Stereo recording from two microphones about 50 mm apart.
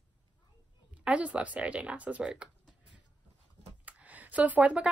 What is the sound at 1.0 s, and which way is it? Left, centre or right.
Speech, right.